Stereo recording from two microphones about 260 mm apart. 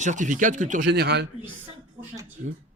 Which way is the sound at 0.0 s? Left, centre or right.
Right.